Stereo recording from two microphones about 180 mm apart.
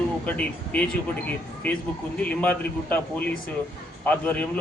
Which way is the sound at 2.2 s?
10° left (ahead or behind).